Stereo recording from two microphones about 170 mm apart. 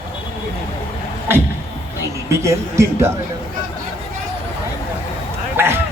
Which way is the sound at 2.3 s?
15° right (ahead or behind).